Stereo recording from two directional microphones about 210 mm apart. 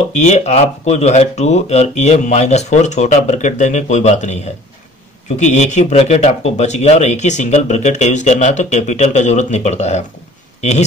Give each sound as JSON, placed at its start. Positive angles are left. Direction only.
{"t": 0.3, "sound": "speech", "side_deg": 30}
{"t": 5.4, "sound": "speech", "side_deg": 35}